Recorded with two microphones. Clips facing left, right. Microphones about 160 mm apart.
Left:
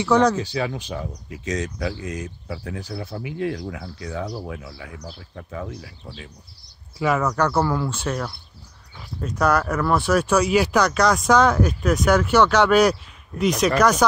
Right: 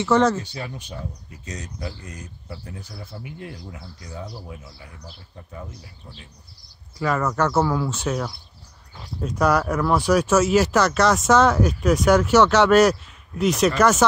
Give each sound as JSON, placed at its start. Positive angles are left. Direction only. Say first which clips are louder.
{"t": 0.0, "sound": "speech", "louder": "left 1 dB", "side_deg": -5}
{"t": 0.4, "sound": "speech", "louder": "left 8 dB", "side_deg": 90}
{"t": 7.0, "sound": "speech", "louder": "left 1 dB", "side_deg": 0}
{"t": 9.8, "sound": "speech", "louder": "right 1 dB", "side_deg": 0}